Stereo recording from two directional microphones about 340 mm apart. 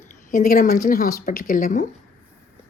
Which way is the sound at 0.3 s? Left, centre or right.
Left.